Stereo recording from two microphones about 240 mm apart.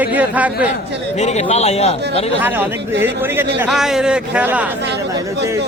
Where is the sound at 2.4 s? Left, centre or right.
Centre.